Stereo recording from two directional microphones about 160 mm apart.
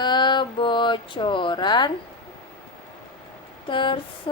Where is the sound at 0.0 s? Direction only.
30° left (ahead or behind).